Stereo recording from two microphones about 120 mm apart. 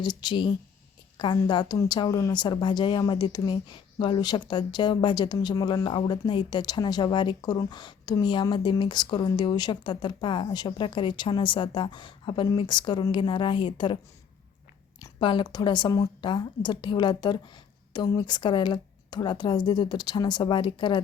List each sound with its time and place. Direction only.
0.0 s a woman's voice: 40° left (ahead or behind)
15.2 s a woman's voice: 40° left (ahead or behind)